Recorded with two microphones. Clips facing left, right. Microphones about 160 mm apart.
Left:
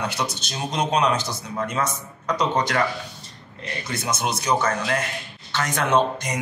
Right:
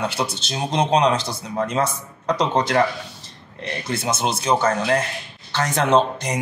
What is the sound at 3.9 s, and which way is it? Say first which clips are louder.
Speech: right 3 dB; 30° right (ahead or behind).